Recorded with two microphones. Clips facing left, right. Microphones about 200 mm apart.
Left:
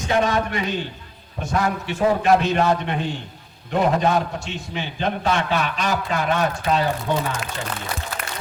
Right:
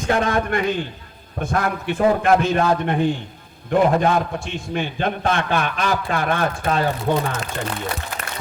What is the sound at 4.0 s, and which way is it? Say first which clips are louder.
A man's voice: right 1 dB; 55° right (ahead or behind).